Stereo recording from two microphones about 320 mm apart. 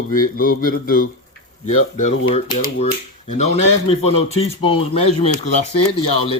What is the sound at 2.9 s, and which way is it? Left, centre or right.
Speech, left.